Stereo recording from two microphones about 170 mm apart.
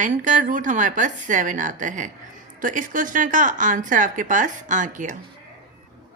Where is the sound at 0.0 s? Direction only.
45° right (ahead or behind).